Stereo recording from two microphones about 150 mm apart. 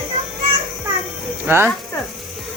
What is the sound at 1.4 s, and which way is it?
Speech, 15° right (ahead or behind).